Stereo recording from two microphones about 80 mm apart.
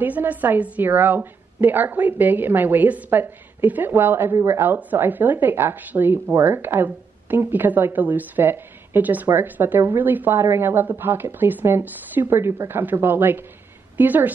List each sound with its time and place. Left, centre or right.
0.0 s a woman's voice: right